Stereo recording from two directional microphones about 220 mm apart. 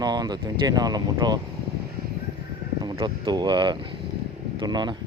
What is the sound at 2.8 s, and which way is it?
Speech, 20° right (ahead or behind).